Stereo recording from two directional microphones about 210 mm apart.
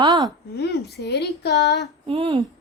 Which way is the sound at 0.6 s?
50° left (ahead or behind).